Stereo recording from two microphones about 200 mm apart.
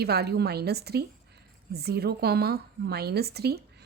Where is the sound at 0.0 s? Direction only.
55° right (ahead or behind).